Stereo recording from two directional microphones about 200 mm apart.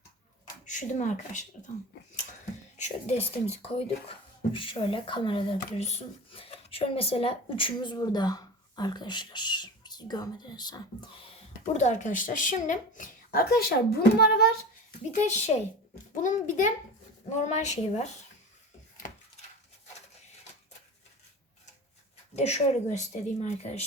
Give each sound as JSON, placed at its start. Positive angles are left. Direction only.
{"t": 0.6, "sound": "speech", "side_deg": 40}
{"t": 2.7, "sound": "speech", "side_deg": 35}
{"t": 15.2, "sound": "speech", "side_deg": 35}
{"t": 22.4, "sound": "speech", "side_deg": 35}